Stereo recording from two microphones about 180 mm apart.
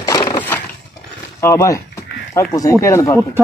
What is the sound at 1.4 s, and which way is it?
Speech, 15° left (ahead or behind).